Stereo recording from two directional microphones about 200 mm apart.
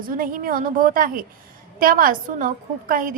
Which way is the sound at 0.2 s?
45° right (ahead or behind).